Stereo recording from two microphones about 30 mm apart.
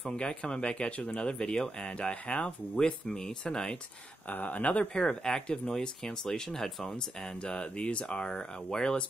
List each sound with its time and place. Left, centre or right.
0.1 s speech: left
1.2 s speech: left
2.7 s speech: left
3.1 s speech: centre
3.4 s speech: left
4.3 s speech: left
4.6 s speech: left
4.9 s speech: left
7.3 s speech: left